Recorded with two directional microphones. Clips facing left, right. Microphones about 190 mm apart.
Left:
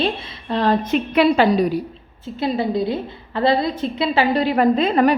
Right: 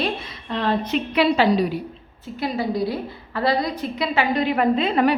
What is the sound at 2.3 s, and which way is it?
A woman's voice, 25° left (ahead or behind).